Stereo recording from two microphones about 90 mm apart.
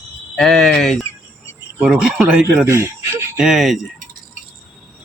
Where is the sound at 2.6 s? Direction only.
30° right (ahead or behind).